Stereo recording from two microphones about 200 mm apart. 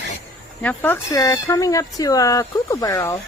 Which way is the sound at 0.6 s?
10° left (ahead or behind).